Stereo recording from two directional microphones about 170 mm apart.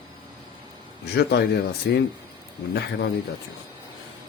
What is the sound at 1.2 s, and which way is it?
Speech, 75° left (ahead or behind).